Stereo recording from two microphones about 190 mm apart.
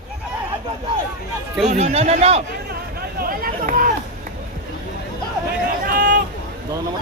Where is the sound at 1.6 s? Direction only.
35° right (ahead or behind).